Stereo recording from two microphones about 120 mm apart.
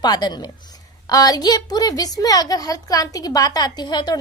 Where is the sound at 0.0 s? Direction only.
35° left (ahead or behind).